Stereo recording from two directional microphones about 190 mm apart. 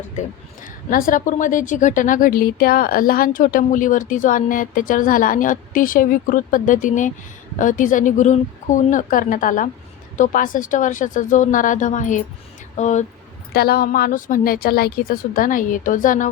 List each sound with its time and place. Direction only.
0.6 s a woman's voice: 50° left (ahead or behind)
13.5 s a woman's voice: 55° left (ahead or behind)